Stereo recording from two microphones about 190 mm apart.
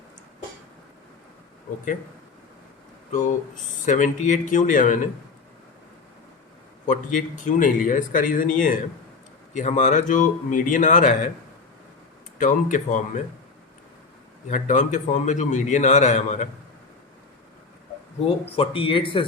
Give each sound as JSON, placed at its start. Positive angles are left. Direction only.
{"t": 3.1, "sound": "a man's voice", "side_deg": 40}
{"t": 6.8, "sound": "a man's voice", "side_deg": 40}
{"t": 12.4, "sound": "a man's voice", "side_deg": 40}
{"t": 14.4, "sound": "a man's voice", "side_deg": 40}
{"t": 18.3, "sound": "speech", "side_deg": 30}